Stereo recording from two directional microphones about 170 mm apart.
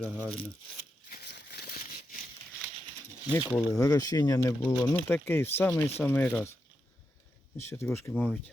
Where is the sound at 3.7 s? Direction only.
20° left (ahead or behind).